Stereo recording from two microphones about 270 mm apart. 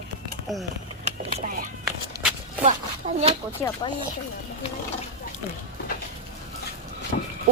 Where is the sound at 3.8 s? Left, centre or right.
Centre.